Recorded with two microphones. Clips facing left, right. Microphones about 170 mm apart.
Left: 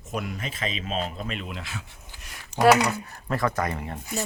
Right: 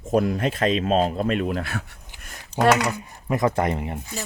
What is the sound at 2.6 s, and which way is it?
Speech, 10° left (ahead or behind).